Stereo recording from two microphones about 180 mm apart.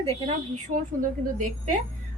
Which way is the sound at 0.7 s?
45° right (ahead or behind).